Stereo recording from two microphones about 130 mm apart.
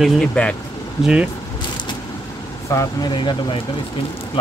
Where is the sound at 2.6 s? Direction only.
30° left (ahead or behind).